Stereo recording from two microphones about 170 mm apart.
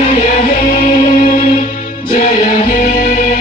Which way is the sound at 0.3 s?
55° left (ahead or behind).